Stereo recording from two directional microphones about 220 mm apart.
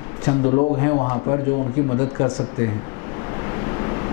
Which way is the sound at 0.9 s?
20° left (ahead or behind).